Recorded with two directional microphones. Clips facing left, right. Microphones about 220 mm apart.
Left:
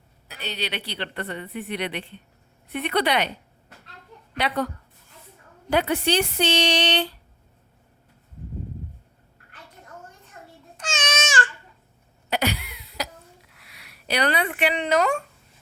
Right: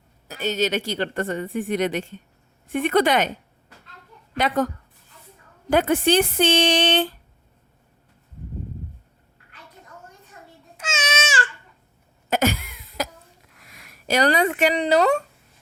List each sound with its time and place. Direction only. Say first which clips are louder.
0.3 s a woman's voice: right 9 dB; 45° right (ahead or behind)
4.4 s a woman's voice: right 4 dB; 45° right (ahead or behind)
5.7 s a woman's voice: right 4 dB; 50° right (ahead or behind)
10.8 s babbling: right 1 dB; 5° right (ahead or behind)
12.3 s cough: right 4 dB; 45° right (ahead or behind)
13.5 s speech: right 3 dB; 45° right (ahead or behind)